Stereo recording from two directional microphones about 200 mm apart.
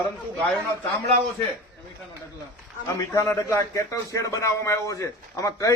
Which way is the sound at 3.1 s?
15° left (ahead or behind).